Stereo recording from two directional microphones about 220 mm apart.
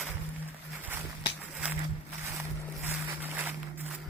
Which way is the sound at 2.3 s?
10° right (ahead or behind).